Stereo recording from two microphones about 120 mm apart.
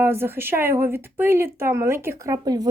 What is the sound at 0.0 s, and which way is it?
A woman's voice, 20° right (ahead or behind).